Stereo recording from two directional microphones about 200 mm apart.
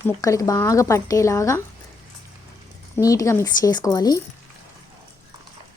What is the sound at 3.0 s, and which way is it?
A woman's voice, 15° left (ahead or behind).